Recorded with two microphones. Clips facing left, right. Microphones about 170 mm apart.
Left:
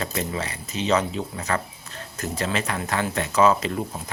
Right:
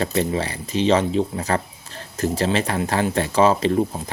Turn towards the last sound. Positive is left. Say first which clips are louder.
# right 3 dB
turn(degrees=-30)  # may be behind; listen again after turning